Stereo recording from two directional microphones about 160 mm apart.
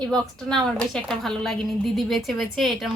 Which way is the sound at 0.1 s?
5° left (ahead or behind).